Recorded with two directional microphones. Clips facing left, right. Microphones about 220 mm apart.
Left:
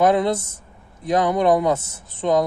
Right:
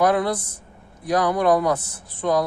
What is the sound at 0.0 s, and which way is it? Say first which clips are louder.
Speech: left 2 dB; 20° left (ahead or behind).